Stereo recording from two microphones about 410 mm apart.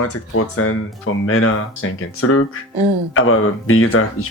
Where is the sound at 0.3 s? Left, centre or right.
Left.